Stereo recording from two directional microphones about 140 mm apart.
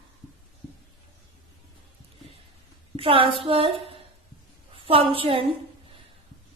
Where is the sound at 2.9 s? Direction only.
40° right (ahead or behind).